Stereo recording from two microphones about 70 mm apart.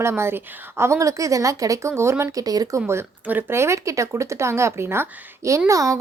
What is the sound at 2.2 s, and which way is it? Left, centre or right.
Speech, right.